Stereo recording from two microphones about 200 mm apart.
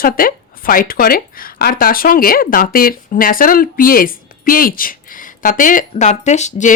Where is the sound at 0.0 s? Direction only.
45° left (ahead or behind).